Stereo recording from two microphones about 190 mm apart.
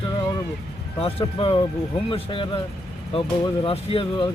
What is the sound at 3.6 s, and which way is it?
Speech, 30° left (ahead or behind).